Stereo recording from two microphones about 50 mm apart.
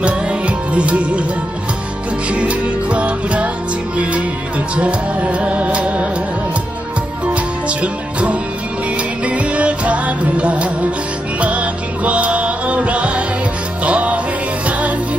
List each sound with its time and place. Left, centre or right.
0.0 s music: right
2.3 s music: right
7.3 s music: right